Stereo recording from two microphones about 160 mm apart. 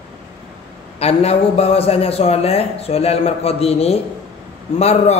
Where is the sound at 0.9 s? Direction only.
40° left (ahead or behind).